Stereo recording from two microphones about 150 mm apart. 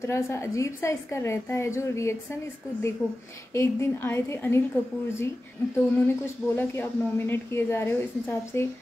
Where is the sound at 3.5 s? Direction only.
20° left (ahead or behind).